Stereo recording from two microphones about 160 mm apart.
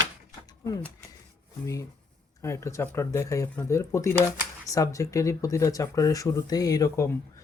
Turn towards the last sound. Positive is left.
turn(degrees=20)  # may be behind; listen again after turning